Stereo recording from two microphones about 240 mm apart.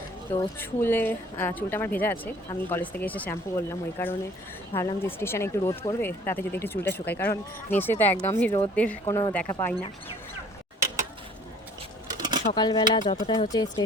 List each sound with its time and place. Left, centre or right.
0.3 s speech: centre
12.0 s a sound: centre
12.5 s speech: centre